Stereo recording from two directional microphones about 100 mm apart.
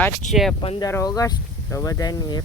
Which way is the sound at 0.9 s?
30° left (ahead or behind).